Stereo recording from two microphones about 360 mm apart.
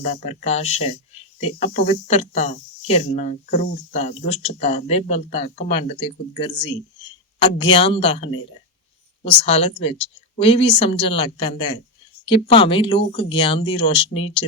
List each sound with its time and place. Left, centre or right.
0.0 s speech: centre